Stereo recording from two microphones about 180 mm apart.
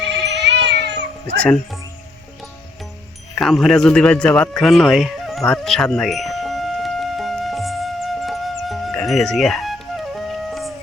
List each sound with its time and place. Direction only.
0.3 s cat: 70° right (ahead or behind)
1.4 s speech: 5° left (ahead or behind)
3.3 s a sound: centre (ahead or behind)